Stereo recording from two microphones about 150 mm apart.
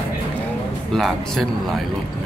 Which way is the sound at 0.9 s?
Centre (ahead or behind).